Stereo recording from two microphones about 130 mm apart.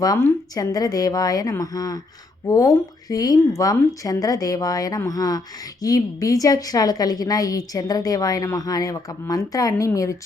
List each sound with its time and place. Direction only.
0.5 s a woman's voice: 30° left (ahead or behind)